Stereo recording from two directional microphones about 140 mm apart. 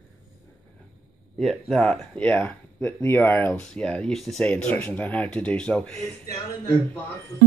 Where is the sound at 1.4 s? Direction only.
Centre (ahead or behind).